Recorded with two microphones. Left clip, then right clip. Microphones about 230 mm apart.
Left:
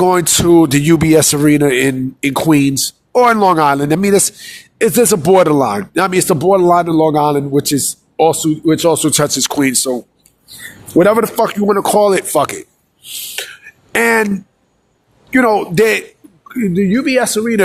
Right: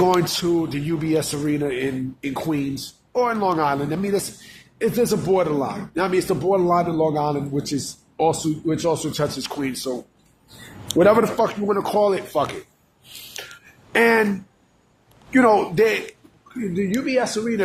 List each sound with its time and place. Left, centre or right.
0.0 s speech: left
10.9 s speech: left
13.4 s beatboxing: left
13.9 s speech: left
15.3 s speech: left